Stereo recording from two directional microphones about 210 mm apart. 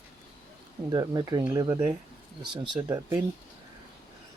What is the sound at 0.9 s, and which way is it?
Speech, 20° right (ahead or behind).